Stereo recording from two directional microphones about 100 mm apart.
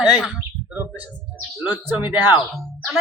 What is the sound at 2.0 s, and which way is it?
Speech, 20° right (ahead or behind).